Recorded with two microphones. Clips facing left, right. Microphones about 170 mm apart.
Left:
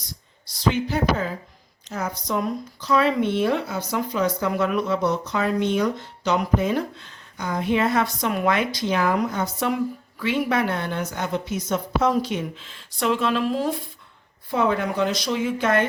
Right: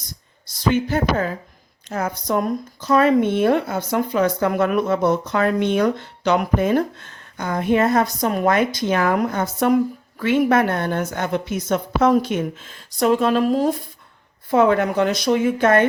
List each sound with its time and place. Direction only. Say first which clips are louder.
0.7 s speech: right 3 dB; 50° right (ahead or behind)
14.5 s speech: right 6 dB; 55° right (ahead or behind)